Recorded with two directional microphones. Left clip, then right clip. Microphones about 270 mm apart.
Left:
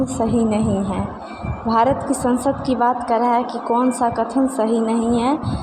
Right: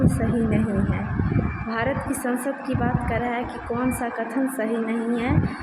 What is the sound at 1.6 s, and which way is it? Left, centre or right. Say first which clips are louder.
A woman's voice: left 10 dB; centre.